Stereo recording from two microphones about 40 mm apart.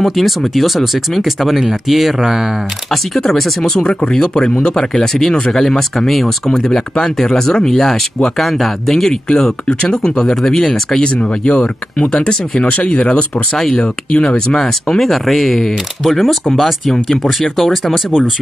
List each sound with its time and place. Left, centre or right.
0.0 s speech: centre
3.3 s speech: centre
10.3 s speech: centre
11.1 s speech: left
13.7 s speech: centre
15.0 s speech: centre